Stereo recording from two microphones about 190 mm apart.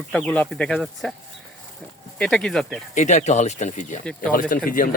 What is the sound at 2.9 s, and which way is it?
Speech, 40° left (ahead or behind).